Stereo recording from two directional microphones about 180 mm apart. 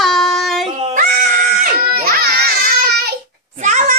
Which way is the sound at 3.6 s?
45° right (ahead or behind).